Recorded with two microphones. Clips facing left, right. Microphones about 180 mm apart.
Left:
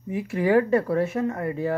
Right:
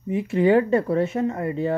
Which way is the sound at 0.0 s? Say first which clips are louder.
Right 5 dB; 20° right (ahead or behind).